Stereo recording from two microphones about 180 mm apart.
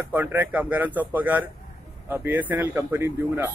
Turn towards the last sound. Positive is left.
turn(degrees=-15)  # may be behind; listen again after turning